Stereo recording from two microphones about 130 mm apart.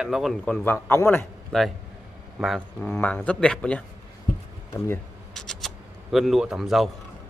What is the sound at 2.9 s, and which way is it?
Speech, 10° left (ahead or behind).